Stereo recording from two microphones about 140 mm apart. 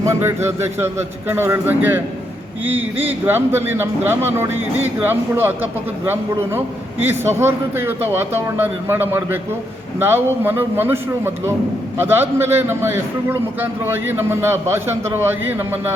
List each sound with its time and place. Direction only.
0.0 s speech: 15° right (ahead or behind)
7.0 s speech: 15° right (ahead or behind)